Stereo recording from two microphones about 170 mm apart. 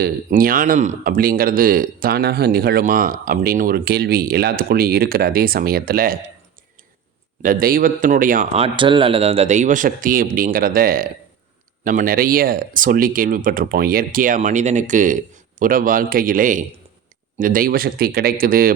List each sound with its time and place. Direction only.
0.0 s speech: 55° right (ahead or behind)
7.4 s speech: 60° right (ahead or behind)
8.5 s a man's voice: 30° right (ahead or behind); by 18.7 s 60° right (ahead or behind)